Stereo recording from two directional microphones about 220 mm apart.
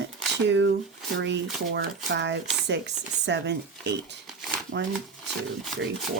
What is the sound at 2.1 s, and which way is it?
Chopping, 50° right (ahead or behind).